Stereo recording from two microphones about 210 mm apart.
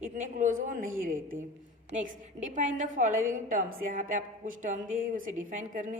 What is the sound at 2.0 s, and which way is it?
A woman's voice, 40° right (ahead or behind).